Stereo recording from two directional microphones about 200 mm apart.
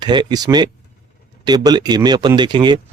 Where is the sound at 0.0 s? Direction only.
20° right (ahead or behind).